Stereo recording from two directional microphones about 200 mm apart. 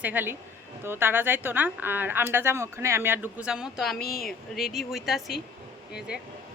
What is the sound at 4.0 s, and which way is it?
Speech, 50° left (ahead or behind).